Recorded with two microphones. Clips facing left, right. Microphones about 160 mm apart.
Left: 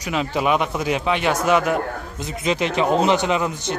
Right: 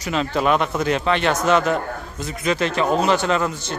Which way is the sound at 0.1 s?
10° left (ahead or behind).